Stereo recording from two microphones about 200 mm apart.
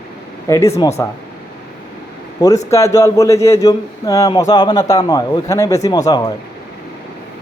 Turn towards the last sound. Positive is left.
turn(degrees=20)  # may be behind; listen again after turning